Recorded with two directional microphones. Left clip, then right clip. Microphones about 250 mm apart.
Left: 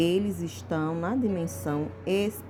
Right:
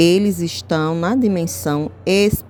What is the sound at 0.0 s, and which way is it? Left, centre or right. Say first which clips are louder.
A woman's voice: right 11 dB; right.